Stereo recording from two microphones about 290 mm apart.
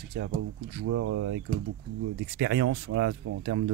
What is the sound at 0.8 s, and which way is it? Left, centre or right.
Speech, right.